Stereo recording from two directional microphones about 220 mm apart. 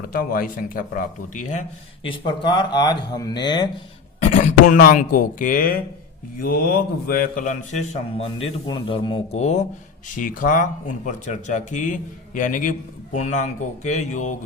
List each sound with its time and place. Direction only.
0.1 s speech: 40° left (ahead or behind)
2.0 s speech: 20° left (ahead or behind)
4.2 s speech: 35° left (ahead or behind)
8.6 s speech: 20° left (ahead or behind)